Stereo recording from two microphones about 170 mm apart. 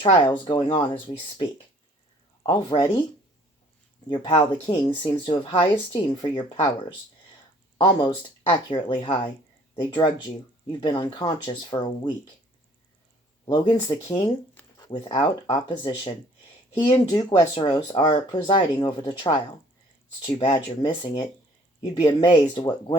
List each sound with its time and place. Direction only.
0.0 s speech: 30° left (ahead or behind)
2.5 s speech: 25° left (ahead or behind)
4.1 s speech: 25° left (ahead or behind)
7.8 s speech: 25° left (ahead or behind)
13.4 s speech: 25° left (ahead or behind)